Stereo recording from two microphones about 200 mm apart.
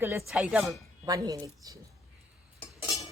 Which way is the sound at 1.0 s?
20° right (ahead or behind).